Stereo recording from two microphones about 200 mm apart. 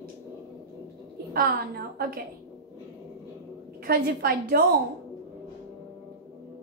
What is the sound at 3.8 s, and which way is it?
Speech, 50° right (ahead or behind).